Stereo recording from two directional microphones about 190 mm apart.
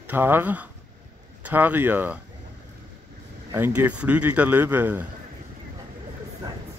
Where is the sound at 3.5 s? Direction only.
10° right (ahead or behind).